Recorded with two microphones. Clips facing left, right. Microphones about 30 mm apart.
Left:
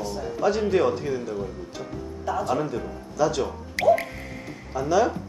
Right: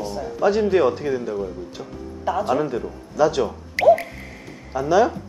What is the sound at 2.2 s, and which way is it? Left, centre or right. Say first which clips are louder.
Speech: right 4 dB; centre.